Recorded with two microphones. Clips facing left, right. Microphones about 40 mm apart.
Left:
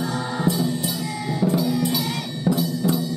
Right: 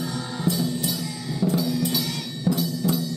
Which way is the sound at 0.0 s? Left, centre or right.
Centre.